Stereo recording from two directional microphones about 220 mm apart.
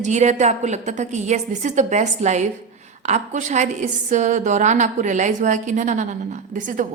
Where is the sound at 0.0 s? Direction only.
30° right (ahead or behind).